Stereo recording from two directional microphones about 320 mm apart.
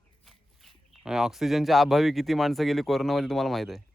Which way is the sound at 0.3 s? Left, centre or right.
Centre.